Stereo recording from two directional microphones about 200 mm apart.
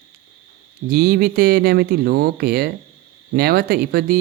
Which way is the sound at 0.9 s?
50° right (ahead or behind).